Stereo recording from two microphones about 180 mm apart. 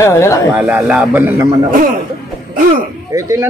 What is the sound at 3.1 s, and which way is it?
Speech, 15° right (ahead or behind).